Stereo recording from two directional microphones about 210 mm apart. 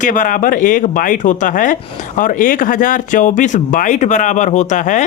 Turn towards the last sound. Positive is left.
turn(degrees=35)  # may be behind; listen again after turning